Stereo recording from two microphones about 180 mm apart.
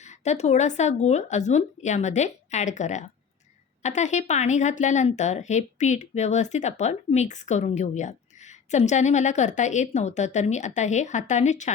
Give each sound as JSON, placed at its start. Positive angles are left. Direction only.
{"t": 0.0, "sound": "speech", "side_deg": 40}